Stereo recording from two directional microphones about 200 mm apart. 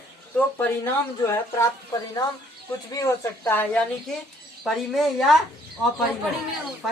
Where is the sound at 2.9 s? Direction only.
15° left (ahead or behind).